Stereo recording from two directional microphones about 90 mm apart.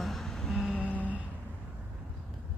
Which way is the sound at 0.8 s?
15° left (ahead or behind).